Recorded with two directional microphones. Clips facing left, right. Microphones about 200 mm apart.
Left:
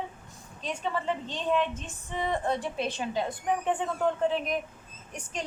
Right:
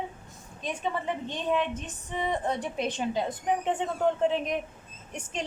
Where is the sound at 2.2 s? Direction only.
15° right (ahead or behind).